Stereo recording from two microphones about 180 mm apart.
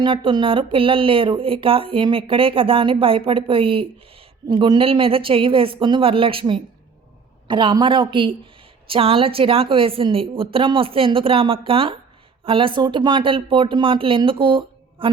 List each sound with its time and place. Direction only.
0.0 s a woman's voice: 25° right (ahead or behind)